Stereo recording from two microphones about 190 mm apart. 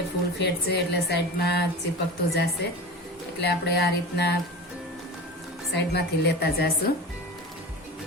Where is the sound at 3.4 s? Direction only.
60° left (ahead or behind).